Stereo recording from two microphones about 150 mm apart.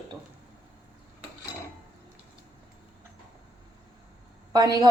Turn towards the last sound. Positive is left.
turn(degrees=-25)  # may be behind; listen again after turning